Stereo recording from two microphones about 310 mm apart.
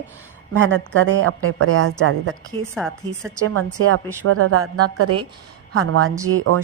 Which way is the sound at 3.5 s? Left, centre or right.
Right.